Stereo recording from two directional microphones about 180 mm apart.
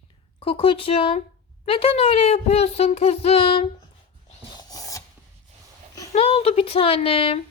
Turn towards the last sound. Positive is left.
turn(degrees=30)  # may be behind; listen again after turning